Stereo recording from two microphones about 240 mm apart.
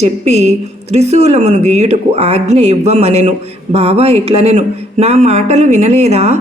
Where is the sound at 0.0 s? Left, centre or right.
Right.